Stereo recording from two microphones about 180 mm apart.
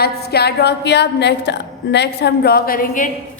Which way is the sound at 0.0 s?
65° left (ahead or behind).